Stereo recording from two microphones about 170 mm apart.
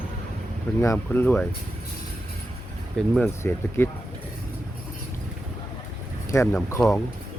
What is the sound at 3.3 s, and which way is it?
Speech, 15° left (ahead or behind).